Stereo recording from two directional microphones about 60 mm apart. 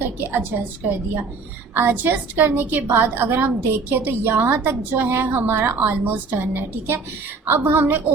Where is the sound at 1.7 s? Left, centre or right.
Right.